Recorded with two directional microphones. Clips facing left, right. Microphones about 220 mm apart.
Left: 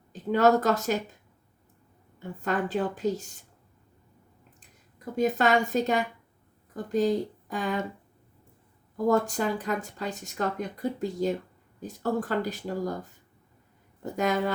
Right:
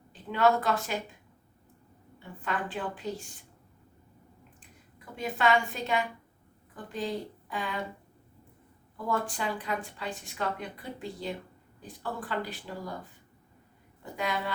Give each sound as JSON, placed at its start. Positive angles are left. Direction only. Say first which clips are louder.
{"t": 0.1, "sound": "a woman's voice", "louder": "left 4 dB", "side_deg": 45}
{"t": 2.1, "sound": "speech", "louder": "left 6 dB", "side_deg": 45}
{"t": 4.9, "sound": "speech", "louder": "left 8 dB", "side_deg": 40}
{"t": 9.0, "sound": "speech", "louder": "left 7 dB", "side_deg": 40}
{"t": 14.0, "sound": "speech", "louder": "left 7 dB", "side_deg": 45}